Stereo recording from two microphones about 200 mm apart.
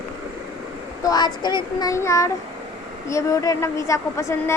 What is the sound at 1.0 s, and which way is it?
A child's voice, 20° left (ahead or behind).